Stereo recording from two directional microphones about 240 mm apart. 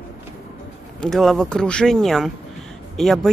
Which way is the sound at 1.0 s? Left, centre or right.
Centre.